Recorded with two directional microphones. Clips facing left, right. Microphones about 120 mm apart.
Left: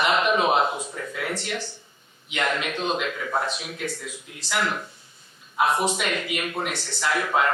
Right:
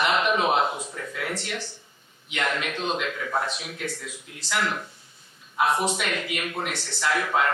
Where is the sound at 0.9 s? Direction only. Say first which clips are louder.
Left 2 dB; 30° left (ahead or behind).